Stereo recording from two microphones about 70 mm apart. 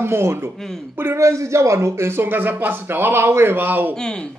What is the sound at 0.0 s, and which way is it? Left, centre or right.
Speech, right.